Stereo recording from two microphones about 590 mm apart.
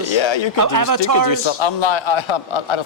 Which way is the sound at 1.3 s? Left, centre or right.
Left.